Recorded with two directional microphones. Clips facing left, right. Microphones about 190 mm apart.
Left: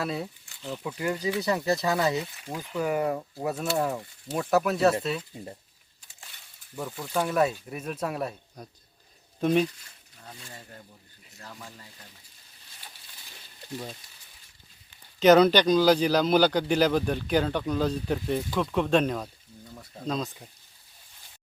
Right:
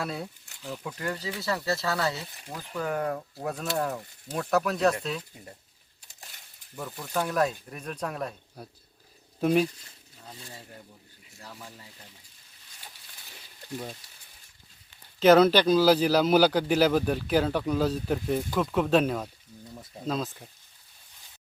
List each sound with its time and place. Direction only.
0.0 s speech: centre (ahead or behind)
6.7 s speech: 5° left (ahead or behind)
8.6 s speech: 5° right (ahead or behind)
11.3 s speech: 5° right (ahead or behind)
13.3 s a sound: 5° right (ahead or behind)
15.2 s speech: centre (ahead or behind)